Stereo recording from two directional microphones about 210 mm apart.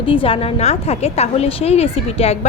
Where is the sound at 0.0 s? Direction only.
25° left (ahead or behind).